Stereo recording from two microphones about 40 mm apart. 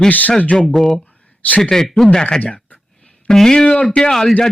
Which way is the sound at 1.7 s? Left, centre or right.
Centre.